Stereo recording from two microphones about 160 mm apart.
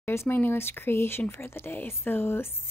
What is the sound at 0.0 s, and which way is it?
Speech, 15° left (ahead or behind).